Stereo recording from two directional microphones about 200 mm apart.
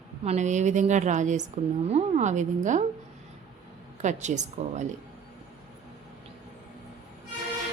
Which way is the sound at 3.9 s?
35° right (ahead or behind).